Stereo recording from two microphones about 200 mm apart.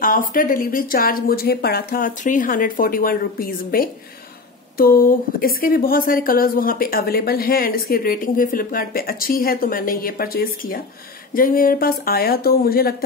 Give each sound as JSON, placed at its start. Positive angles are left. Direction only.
{"t": 0.0, "sound": "speech", "side_deg": 45}